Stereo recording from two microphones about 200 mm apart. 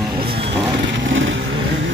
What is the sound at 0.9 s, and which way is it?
Vehicle, 70° right (ahead or behind).